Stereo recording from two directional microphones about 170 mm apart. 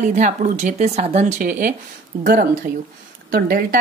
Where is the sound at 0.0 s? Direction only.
45° right (ahead or behind).